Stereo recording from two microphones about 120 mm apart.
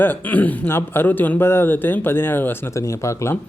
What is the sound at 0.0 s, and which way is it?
A man's voice, 15° left (ahead or behind).